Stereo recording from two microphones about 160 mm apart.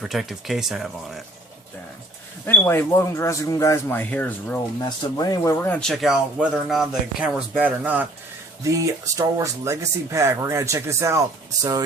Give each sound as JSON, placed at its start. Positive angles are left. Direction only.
{"t": 0.0, "sound": "speech", "side_deg": 0}
{"t": 2.5, "sound": "speech", "side_deg": 15}
{"t": 4.8, "sound": "speech", "side_deg": 25}
{"t": 6.0, "sound": "speech", "side_deg": -5}
{"t": 8.6, "sound": "speech", "side_deg": -20}